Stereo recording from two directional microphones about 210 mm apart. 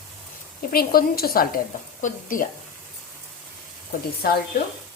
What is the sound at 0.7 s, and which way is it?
A woman's voice, 45° left (ahead or behind).